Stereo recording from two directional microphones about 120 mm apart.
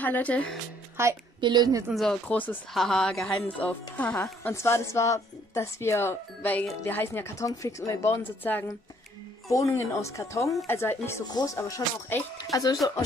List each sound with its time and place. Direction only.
0.0 s speech: 15° left (ahead or behind)
1.0 s a woman's voice: 20° right (ahead or behind)
1.4 s a woman's voice: 35° right (ahead or behind)
1.9 s speech: 5° left (ahead or behind)
2.7 s a woman's voice: 5° left (ahead or behind)
9.5 s a woman's voice: 25° left (ahead or behind)
10.4 s speech: centre (ahead or behind)
10.7 s a woman's voice: 20° left (ahead or behind)
11.2 s speech: 35° left (ahead or behind)
11.5 s a woman's voice: 25° left (ahead or behind)